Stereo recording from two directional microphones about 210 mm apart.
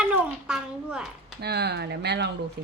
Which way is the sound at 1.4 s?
50° right (ahead or behind).